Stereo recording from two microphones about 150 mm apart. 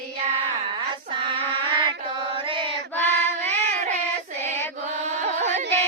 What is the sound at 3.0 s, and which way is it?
Female singing, 10° left (ahead or behind).